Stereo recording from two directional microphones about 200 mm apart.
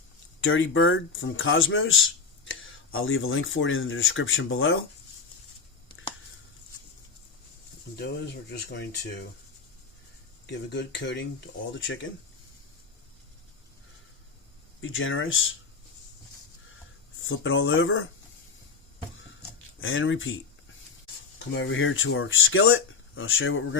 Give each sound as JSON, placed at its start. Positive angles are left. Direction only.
{"t": 0.4, "sound": "speech", "side_deg": 70}
{"t": 7.9, "sound": "speech", "side_deg": 55}
{"t": 10.4, "sound": "speech", "side_deg": 60}
{"t": 14.8, "sound": "speech", "side_deg": 80}
{"t": 17.2, "sound": "speech", "side_deg": 75}
{"t": 19.8, "sound": "speech", "side_deg": 75}
{"t": 21.5, "sound": "speech", "side_deg": 65}